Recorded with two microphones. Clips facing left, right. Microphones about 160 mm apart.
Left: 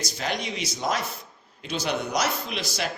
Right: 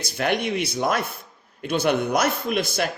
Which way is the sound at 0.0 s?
60° right (ahead or behind).